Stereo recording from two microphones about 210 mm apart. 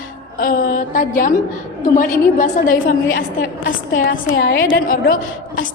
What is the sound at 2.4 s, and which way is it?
A woman's voice, 40° left (ahead or behind).